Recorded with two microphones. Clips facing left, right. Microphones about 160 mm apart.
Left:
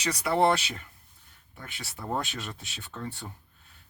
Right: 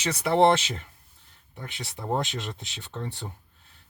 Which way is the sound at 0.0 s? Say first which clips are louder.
Right 4 dB; 25° right (ahead or behind).